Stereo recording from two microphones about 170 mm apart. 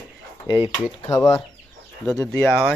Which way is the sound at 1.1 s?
20° left (ahead or behind).